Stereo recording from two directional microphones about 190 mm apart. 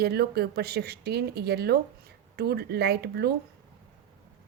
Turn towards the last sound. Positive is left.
turn(degrees=-55)  # may be behind; listen again after turning